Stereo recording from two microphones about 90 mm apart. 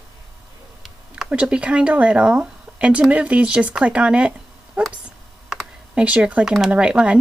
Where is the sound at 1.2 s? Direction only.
15° right (ahead or behind).